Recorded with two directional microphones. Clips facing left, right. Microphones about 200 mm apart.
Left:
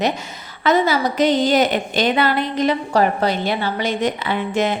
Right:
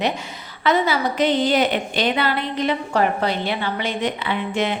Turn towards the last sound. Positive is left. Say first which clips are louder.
# left 3 dB
turn(degrees=45)  # may be behind; listen again after turning